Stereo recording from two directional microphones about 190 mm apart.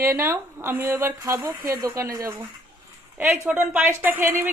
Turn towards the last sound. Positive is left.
turn(degrees=-10)  # may be behind; listen again after turning